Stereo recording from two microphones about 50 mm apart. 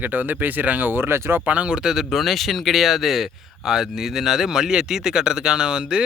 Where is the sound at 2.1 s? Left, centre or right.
Centre.